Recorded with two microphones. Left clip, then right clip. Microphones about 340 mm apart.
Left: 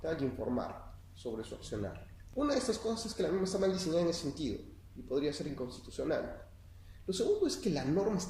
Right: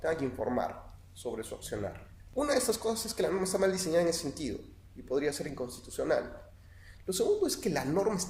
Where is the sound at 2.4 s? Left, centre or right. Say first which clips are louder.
Right 4 dB; right.